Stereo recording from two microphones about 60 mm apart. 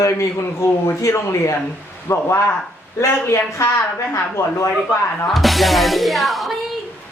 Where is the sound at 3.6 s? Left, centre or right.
Left.